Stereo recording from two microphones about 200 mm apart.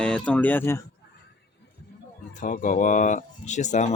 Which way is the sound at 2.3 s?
40° left (ahead or behind).